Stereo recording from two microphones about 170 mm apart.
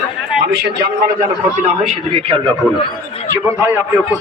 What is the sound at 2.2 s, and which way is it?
Speech, 30° right (ahead or behind).